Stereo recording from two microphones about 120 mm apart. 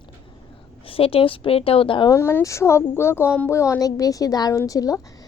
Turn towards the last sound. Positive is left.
turn(degrees=30)  # may be behind; listen again after turning